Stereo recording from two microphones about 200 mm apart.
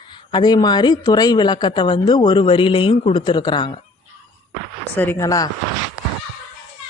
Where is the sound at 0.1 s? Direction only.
20° left (ahead or behind).